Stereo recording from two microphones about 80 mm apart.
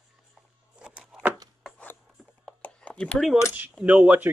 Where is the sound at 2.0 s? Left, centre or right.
Centre.